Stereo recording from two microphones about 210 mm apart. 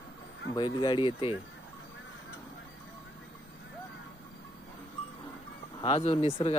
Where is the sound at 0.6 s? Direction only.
20° left (ahead or behind).